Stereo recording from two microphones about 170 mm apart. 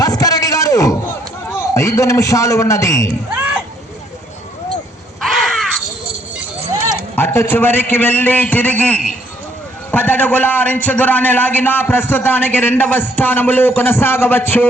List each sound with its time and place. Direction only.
0.0 s a sound: 20° left (ahead or behind)
1.5 s a man's voice: 15° left (ahead or behind)
5.4 s caw: centre (ahead or behind)
7.2 s a man's voice: 15° left (ahead or behind)